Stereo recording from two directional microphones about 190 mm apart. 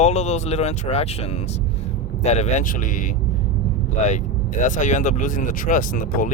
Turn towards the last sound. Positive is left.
turn(degrees=45)  # may be behind; listen again after turning